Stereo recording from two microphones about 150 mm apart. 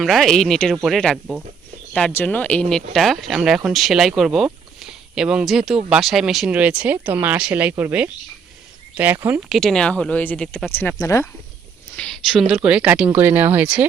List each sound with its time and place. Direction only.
0.0 s speech: centre (ahead or behind)
9.5 s speech: centre (ahead or behind)
10.9 s speech: 20° left (ahead or behind)
11.9 s a sound: 5° left (ahead or behind)
12.3 s speech: 5° right (ahead or behind)